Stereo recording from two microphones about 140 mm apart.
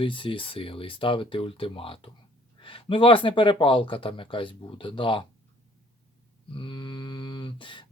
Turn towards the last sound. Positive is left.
turn(degrees=35)  # may be behind; listen again after turning